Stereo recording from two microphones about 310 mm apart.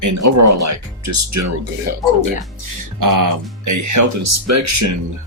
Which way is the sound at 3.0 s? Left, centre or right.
Right.